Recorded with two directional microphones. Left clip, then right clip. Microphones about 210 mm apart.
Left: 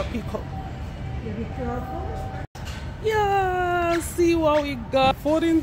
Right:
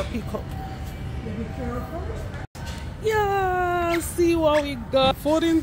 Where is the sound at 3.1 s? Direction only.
Centre (ahead or behind).